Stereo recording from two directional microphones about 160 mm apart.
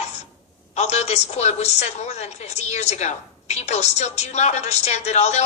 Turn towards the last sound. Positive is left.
turn(degrees=45)  # may be behind; listen again after turning